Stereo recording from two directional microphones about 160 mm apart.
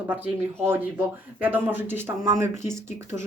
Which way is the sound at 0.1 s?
10° right (ahead or behind).